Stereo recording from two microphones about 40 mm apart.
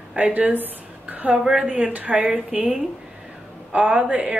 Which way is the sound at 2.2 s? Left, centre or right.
Centre.